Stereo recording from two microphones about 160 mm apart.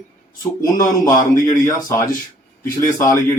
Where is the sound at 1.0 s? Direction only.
25° left (ahead or behind).